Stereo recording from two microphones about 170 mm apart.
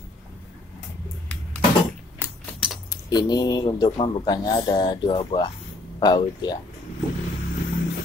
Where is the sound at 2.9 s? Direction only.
20° left (ahead or behind).